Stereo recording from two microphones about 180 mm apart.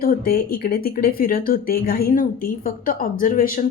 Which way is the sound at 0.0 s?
55° left (ahead or behind).